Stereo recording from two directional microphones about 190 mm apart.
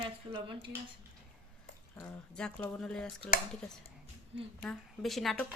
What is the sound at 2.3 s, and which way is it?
Speech, 5° left (ahead or behind).